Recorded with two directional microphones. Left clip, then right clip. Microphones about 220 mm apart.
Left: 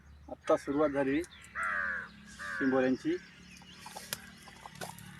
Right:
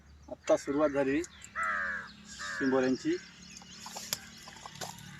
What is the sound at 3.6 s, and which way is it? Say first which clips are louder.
Chicken: right 2 dB; 15° right (ahead or behind).